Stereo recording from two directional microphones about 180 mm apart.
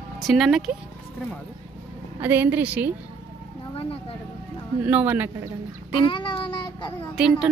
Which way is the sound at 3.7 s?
30° left (ahead or behind).